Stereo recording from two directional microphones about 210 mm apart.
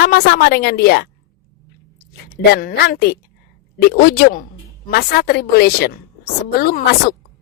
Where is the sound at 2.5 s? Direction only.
45° left (ahead or behind).